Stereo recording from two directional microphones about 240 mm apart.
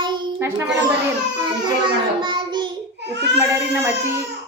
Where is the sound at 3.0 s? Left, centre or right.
Right.